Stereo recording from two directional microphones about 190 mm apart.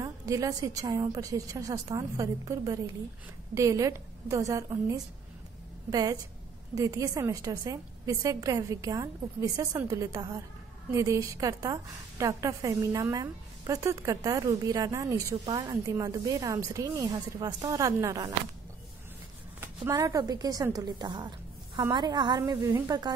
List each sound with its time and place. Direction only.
0.0 s a woman's voice: 15° right (ahead or behind)
19.9 s a woman's voice: 20° right (ahead or behind)